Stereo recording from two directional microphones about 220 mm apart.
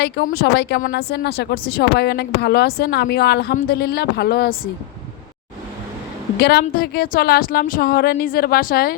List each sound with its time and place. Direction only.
0.0 s a woman's voice: 45° left (ahead or behind)
6.4 s a woman's voice: 45° left (ahead or behind)